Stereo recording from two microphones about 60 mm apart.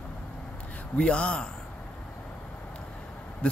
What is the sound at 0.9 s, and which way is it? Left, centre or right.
Speech, centre.